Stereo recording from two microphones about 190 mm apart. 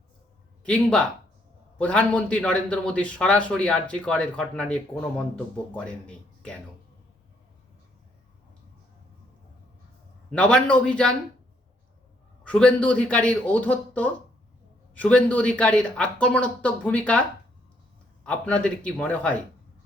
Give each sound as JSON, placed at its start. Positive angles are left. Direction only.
{"t": 0.6, "sound": "a man's voice", "side_deg": 5}
{"t": 10.3, "sound": "a man's voice", "side_deg": 5}
{"t": 12.5, "sound": "speech", "side_deg": 5}